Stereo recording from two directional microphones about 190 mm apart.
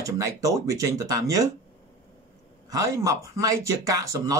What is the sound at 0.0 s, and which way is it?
Speech, 15° right (ahead or behind).